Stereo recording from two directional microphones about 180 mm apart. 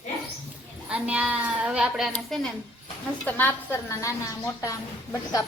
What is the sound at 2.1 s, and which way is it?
A child's voice, 5° left (ahead or behind).